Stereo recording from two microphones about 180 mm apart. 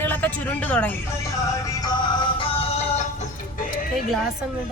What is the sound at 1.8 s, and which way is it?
Music, 25° left (ahead or behind).